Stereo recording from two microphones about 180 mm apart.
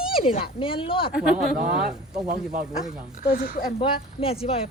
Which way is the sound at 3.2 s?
55° left (ahead or behind).